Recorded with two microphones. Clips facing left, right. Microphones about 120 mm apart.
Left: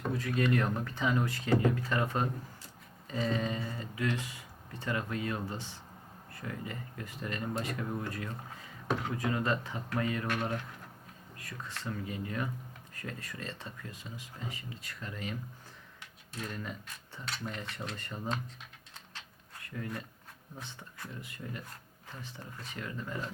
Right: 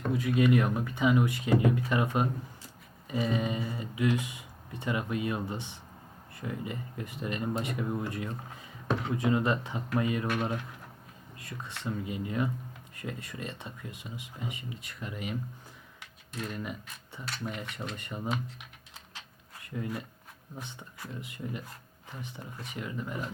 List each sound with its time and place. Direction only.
0.1 s speech: 10° right (ahead or behind)
11.3 s speech: 20° right (ahead or behind)
16.4 s speech: 15° right (ahead or behind)
19.6 s speech: 20° right (ahead or behind)